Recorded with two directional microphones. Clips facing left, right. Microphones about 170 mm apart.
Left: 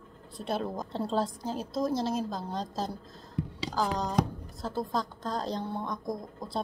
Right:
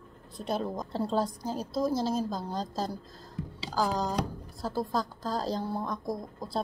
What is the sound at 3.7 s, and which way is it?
A woman's voice, centre (ahead or behind).